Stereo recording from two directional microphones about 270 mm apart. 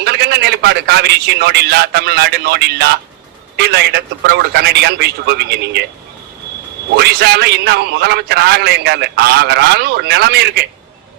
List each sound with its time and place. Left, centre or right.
0.0 s a man's voice: right
6.9 s a man's voice: right